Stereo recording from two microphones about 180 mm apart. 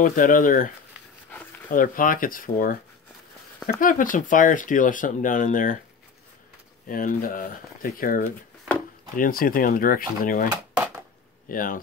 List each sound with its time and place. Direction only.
0.0 s speech: 50° left (ahead or behind)
1.7 s speech: 50° left (ahead or behind)
3.8 s speech: 50° left (ahead or behind)
6.9 s speech: 50° left (ahead or behind)